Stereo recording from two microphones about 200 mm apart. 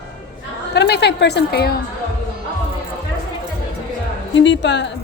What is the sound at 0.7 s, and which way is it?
A woman's voice, 55° left (ahead or behind).